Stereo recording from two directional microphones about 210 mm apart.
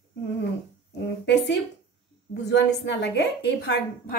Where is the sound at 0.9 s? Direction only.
55° left (ahead or behind).